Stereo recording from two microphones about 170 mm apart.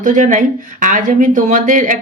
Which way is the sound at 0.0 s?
50° right (ahead or behind).